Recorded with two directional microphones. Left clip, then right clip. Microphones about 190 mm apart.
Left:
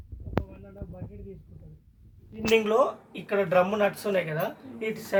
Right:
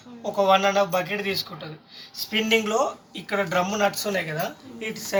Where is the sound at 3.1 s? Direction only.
30° left (ahead or behind).